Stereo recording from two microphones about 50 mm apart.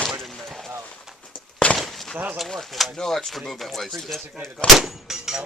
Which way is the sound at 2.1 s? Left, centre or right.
Right.